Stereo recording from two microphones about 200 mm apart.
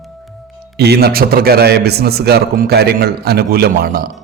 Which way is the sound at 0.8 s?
55° right (ahead or behind).